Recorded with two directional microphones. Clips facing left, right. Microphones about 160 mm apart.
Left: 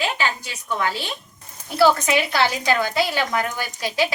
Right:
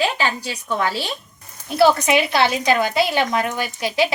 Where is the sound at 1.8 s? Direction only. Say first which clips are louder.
Right 2 dB; 20° right (ahead or behind).